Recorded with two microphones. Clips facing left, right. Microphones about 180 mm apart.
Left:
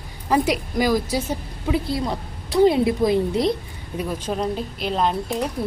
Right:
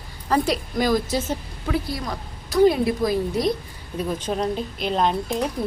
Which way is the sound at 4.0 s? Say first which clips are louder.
Even; 5° left (ahead or behind).